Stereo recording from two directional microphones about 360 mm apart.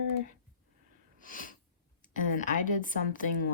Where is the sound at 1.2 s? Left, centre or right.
Left.